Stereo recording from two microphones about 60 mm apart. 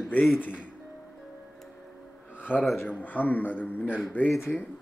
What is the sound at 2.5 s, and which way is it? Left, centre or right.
A man's voice, left.